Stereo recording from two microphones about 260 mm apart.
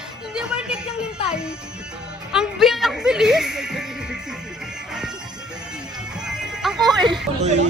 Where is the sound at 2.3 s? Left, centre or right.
Centre.